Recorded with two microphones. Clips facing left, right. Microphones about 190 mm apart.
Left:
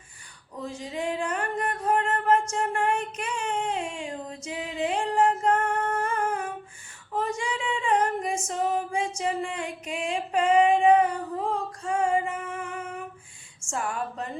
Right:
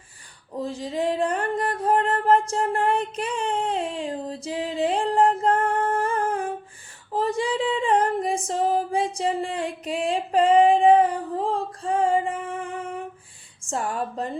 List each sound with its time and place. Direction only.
0.5 s music: 35° right (ahead or behind)
7.1 s female singing: 35° right (ahead or behind)
13.7 s a sound: 35° right (ahead or behind)